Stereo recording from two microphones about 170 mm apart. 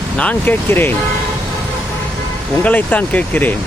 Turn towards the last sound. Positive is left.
turn(degrees=10)  # may be behind; listen again after turning